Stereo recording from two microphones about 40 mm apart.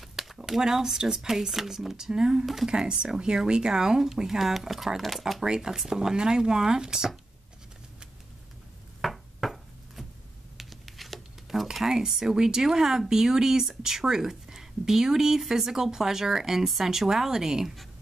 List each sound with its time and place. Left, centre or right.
0.0 s speech: centre
5.4 s speech: centre
9.0 s a sound: centre
11.7 s speech: centre